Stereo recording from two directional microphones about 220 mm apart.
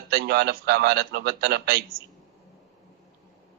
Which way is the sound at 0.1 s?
50° right (ahead or behind).